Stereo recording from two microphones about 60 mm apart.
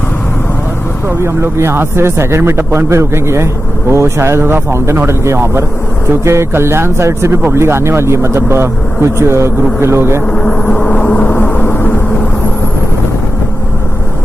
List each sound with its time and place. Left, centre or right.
1.0 s a man's voice: right
10.2 s speech: centre
11.2 s vehicle: left